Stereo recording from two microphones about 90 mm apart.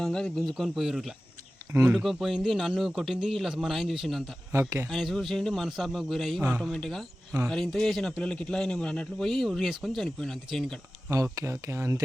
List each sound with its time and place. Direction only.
0.0 s a man's voice: 5° left (ahead or behind)
11.1 s speech: 40° right (ahead or behind)